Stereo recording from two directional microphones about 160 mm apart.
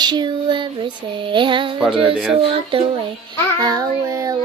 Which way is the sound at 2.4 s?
35° right (ahead or behind).